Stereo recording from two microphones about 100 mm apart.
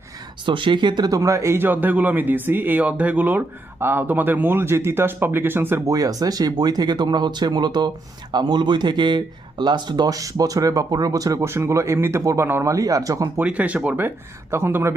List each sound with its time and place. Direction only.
0.4 s speech: 55° right (ahead or behind); by 5.9 s 25° right (ahead or behind)
5.9 s speech: 40° right (ahead or behind)
13.4 s speech: 15° right (ahead or behind)